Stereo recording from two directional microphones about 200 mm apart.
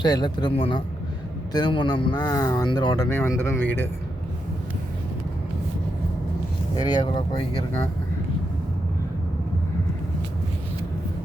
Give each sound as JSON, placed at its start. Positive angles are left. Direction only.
{"t": 0.0, "sound": "speech", "side_deg": 20}
{"t": 6.7, "sound": "speech", "side_deg": 20}